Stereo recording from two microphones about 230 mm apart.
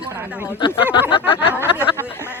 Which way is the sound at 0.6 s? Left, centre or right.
Left.